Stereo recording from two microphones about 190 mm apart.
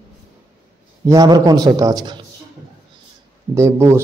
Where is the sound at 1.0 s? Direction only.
20° right (ahead or behind).